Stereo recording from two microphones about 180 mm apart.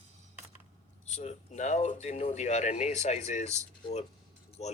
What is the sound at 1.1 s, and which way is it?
Speech, 40° left (ahead or behind).